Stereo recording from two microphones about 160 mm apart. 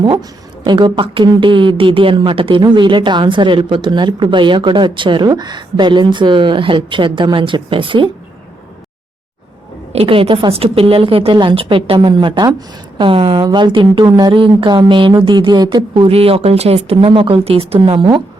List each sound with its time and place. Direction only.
0.0 s a woman's voice: 30° right (ahead or behind)
9.9 s a woman's voice: 35° right (ahead or behind)